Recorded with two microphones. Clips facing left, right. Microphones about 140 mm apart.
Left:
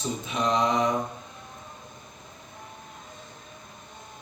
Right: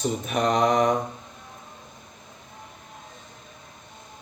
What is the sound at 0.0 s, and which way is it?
Mantra, 65° right (ahead or behind).